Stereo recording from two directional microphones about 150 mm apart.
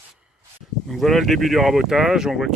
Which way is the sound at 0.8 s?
Centre (ahead or behind).